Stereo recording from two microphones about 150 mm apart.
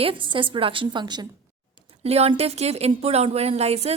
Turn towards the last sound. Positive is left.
turn(degrees=-45)  # may be behind; listen again after turning